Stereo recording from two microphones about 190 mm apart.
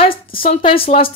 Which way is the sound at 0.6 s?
30° left (ahead or behind).